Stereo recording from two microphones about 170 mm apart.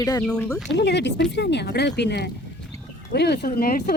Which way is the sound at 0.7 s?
90° left.